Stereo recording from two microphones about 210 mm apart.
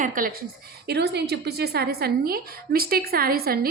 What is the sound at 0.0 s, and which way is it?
A woman's voice, 40° right (ahead or behind).